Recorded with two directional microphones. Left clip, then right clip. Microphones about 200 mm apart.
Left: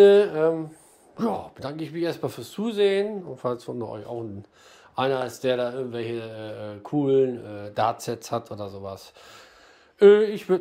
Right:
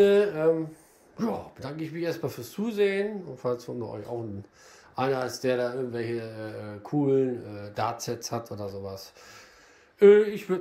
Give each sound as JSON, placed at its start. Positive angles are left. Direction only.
{"t": 0.0, "sound": "speech", "side_deg": 15}
{"t": 8.5, "sound": "speech", "side_deg": 30}
{"t": 9.9, "sound": "speech", "side_deg": 15}